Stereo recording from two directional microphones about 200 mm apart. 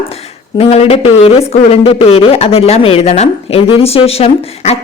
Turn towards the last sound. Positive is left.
turn(degrees=30)  # may be behind; listen again after turning